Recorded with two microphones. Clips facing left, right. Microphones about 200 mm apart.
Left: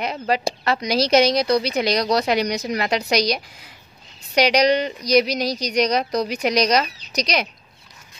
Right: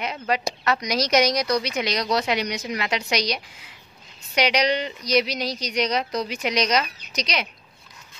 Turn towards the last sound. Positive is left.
turn(degrees=40)  # may be behind; listen again after turning